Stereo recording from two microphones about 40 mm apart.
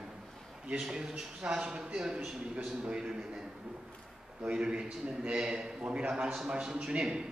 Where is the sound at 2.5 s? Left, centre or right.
Right.